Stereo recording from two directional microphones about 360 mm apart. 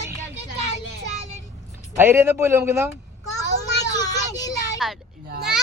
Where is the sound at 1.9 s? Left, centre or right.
Centre.